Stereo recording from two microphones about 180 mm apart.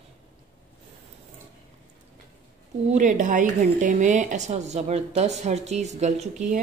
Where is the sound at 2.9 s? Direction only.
45° right (ahead or behind).